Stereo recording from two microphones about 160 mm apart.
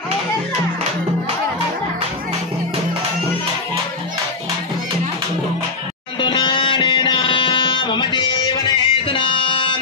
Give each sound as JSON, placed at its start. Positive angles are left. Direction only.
{"t": 6.2, "sound": "music", "side_deg": 30}